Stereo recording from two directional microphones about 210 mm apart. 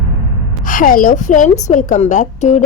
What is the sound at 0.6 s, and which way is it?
A woman's voice, 40° left (ahead or behind).